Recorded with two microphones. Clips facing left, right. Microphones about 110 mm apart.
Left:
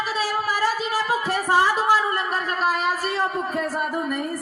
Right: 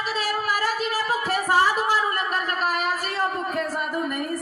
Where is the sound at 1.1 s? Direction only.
15° left (ahead or behind).